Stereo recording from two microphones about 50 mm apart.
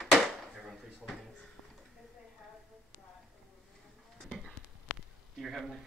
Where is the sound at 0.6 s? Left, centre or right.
Centre.